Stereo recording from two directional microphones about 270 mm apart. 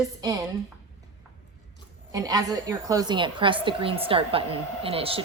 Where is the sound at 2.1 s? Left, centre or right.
Centre.